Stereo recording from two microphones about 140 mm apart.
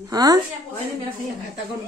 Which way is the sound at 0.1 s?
25° right (ahead or behind).